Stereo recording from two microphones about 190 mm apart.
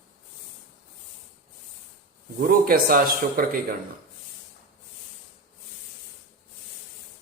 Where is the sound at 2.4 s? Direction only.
50° right (ahead or behind).